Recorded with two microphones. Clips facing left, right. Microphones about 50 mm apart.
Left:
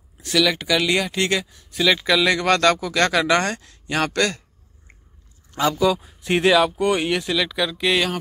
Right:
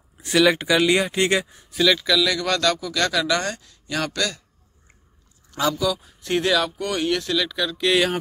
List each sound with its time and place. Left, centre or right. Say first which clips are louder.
0.2 s speech: right 2 dB; centre
2.1 s speech: left 3 dB; left
5.5 s speech: left 3 dB; left; by 8.1 s centre